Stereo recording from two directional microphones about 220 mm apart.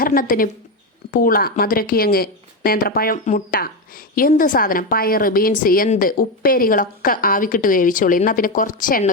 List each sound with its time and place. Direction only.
0.0 s speech: 40° left (ahead or behind)